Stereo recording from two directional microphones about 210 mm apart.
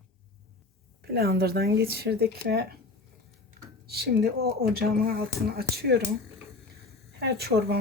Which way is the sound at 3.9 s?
50° right (ahead or behind).